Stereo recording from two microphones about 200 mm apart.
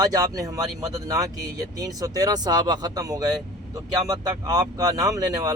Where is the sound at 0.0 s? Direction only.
20° right (ahead or behind).